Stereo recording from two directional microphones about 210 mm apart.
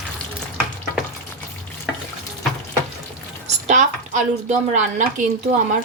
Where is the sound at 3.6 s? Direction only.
35° right (ahead or behind).